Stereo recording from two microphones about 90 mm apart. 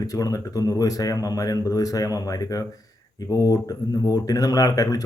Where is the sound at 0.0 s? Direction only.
40° left (ahead or behind).